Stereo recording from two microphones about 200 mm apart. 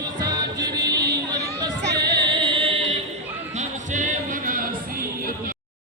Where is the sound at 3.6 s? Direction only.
40° right (ahead or behind).